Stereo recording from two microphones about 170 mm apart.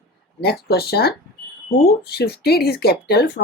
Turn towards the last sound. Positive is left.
turn(degrees=70)  # may be behind; listen again after turning